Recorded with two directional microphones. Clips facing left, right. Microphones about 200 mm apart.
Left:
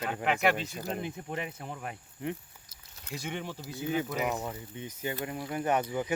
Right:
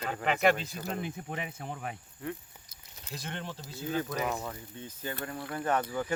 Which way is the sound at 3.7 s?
15° left (ahead or behind).